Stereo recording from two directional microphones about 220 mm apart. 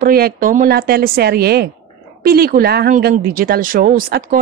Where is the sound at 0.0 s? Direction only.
40° right (ahead or behind).